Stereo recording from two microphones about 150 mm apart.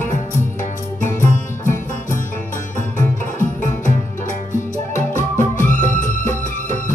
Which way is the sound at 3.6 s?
55° left (ahead or behind).